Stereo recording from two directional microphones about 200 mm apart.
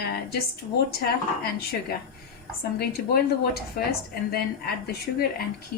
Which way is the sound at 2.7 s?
50° left (ahead or behind).